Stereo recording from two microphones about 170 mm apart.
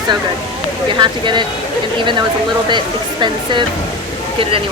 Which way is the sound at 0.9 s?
25° right (ahead or behind).